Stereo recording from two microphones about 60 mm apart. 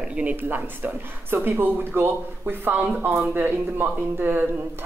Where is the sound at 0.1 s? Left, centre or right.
Right.